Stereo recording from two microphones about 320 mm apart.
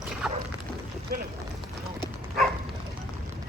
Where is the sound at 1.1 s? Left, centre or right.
Right.